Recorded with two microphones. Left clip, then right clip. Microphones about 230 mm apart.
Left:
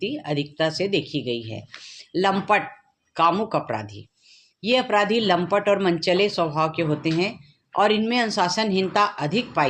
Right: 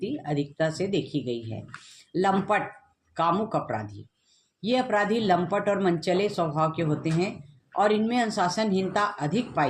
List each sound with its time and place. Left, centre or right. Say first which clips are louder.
0.0 s speech: left 3 dB; left